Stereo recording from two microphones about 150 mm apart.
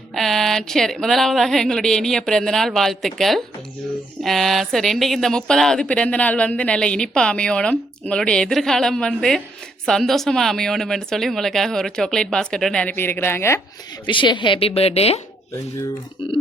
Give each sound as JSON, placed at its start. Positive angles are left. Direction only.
{"t": 0.1, "sound": "speech", "side_deg": 0}
{"t": 14.1, "sound": "a woman's voice", "side_deg": 30}
{"t": 15.5, "sound": "speech", "side_deg": 25}